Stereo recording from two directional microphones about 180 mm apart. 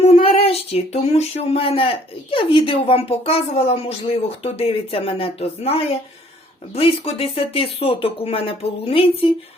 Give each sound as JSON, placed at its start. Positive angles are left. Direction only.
{"t": 0.2, "sound": "speech", "side_deg": 35}